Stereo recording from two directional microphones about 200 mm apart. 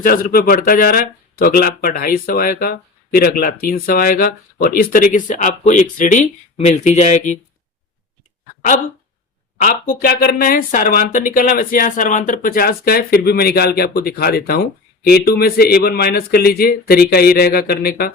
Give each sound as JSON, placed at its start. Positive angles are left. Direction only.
{"t": 0.0, "sound": "speech", "side_deg": 45}
{"t": 9.6, "sound": "speech", "side_deg": 45}